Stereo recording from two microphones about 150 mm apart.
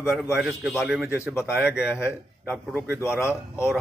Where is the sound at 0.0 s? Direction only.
5° right (ahead or behind).